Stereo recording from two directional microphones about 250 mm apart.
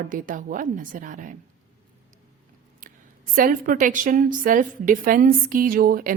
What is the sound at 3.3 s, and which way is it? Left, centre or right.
A woman's voice, right.